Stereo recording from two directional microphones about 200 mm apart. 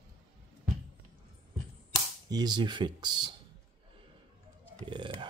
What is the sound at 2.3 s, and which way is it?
Speech, 20° right (ahead or behind).